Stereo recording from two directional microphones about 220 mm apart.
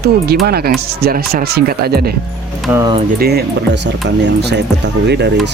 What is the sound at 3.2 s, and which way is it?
Speech, 45° right (ahead or behind).